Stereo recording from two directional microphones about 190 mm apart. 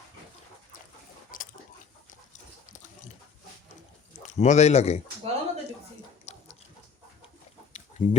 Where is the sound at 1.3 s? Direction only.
45° left (ahead or behind).